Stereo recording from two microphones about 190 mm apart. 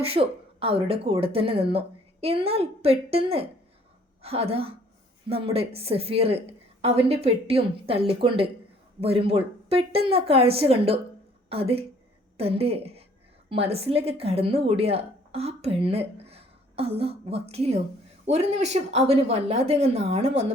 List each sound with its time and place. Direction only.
0.0 s speech: 30° right (ahead or behind)
4.2 s a woman's voice: 30° right (ahead or behind)